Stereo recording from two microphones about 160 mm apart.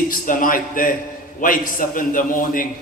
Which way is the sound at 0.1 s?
60° left (ahead or behind).